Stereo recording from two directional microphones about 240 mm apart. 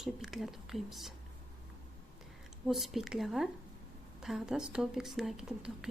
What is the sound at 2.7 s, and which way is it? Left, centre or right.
Speech, centre.